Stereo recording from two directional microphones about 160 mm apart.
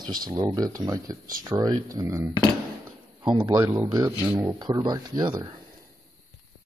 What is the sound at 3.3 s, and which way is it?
Speech, 25° right (ahead or behind).